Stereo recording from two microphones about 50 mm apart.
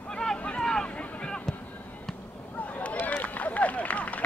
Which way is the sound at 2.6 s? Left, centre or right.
Left.